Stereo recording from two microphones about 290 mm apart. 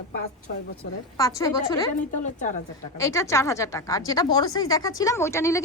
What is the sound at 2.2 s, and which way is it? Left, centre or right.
Speech, left.